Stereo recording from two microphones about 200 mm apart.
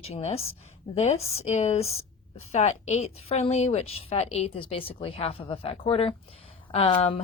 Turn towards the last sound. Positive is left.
turn(degrees=30)  # may be behind; listen again after turning